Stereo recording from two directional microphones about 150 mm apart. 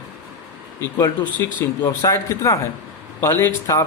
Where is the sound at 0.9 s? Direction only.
25° left (ahead or behind).